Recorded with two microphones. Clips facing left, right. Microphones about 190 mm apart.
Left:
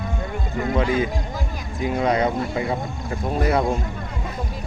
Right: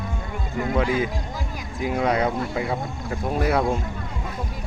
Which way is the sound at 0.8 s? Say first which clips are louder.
Left 1 dB; 5° right (ahead or behind).